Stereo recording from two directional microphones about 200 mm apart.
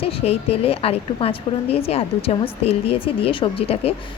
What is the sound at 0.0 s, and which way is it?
A woman's voice, 30° left (ahead or behind).